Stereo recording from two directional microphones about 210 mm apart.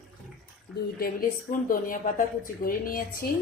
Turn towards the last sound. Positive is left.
turn(degrees=45)  # may be behind; listen again after turning